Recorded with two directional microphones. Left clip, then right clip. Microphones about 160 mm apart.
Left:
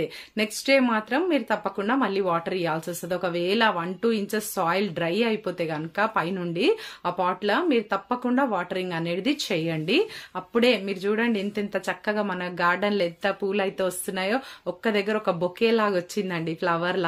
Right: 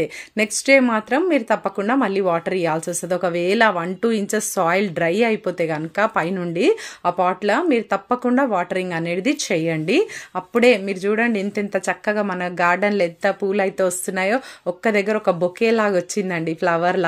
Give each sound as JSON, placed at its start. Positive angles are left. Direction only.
{"t": 0.0, "sound": "speech", "side_deg": -45}